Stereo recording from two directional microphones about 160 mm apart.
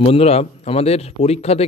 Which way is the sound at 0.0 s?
40° left (ahead or behind).